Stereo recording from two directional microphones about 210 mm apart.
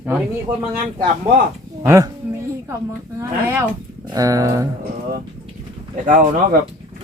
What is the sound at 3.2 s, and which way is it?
Speech, 10° right (ahead or behind).